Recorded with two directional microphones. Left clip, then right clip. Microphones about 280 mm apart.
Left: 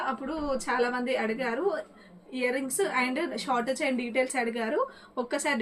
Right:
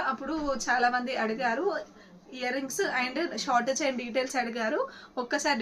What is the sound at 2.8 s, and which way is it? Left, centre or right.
A woman's voice, centre.